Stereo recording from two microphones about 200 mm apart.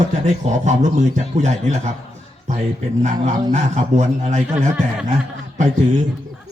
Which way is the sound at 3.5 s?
35° right (ahead or behind).